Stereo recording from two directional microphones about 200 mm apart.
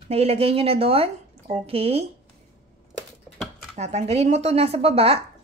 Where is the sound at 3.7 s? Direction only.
35° right (ahead or behind).